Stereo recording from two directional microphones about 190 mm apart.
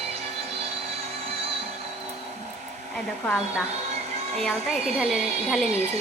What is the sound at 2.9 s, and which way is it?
A woman's voice, centre (ahead or behind).